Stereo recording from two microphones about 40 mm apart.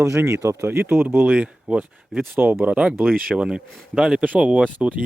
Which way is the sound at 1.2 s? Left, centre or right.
Right.